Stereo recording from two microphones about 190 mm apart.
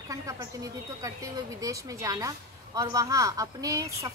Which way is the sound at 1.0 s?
15° right (ahead or behind).